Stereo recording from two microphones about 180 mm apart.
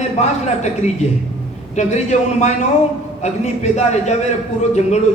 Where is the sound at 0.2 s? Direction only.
40° left (ahead or behind).